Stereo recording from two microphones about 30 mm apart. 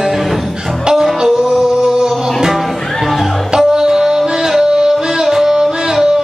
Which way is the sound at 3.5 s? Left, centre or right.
Right.